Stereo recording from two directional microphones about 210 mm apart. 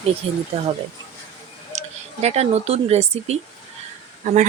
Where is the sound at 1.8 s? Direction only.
30° right (ahead or behind).